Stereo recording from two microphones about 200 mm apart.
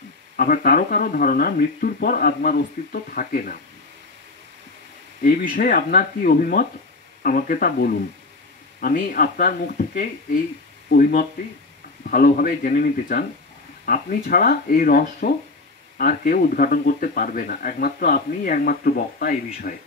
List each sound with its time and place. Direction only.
0.4 s speech: 45° left (ahead or behind)
5.2 s speech: 45° left (ahead or behind)